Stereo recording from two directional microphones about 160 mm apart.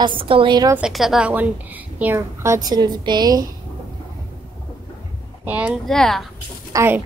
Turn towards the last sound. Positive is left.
turn(degrees=-15)  # may be behind; listen again after turning